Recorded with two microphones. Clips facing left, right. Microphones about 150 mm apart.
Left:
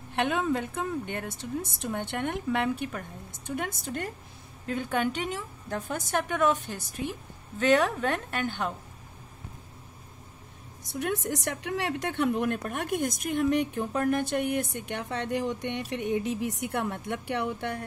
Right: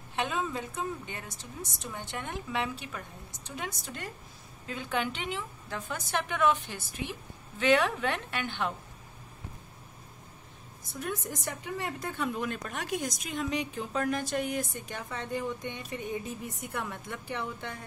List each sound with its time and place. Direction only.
0.1 s a woman's voice: 60° left (ahead or behind); by 8.6 s 40° left (ahead or behind)
10.8 s a woman's voice: 70° left (ahead or behind)